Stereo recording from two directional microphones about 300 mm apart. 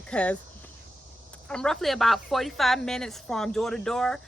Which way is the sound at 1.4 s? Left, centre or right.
Centre.